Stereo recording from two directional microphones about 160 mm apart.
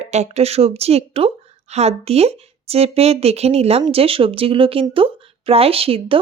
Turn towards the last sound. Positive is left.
turn(degrees=-35)  # may be behind; listen again after turning